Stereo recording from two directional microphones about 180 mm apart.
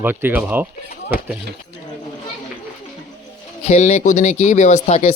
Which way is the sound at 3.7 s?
40° left (ahead or behind).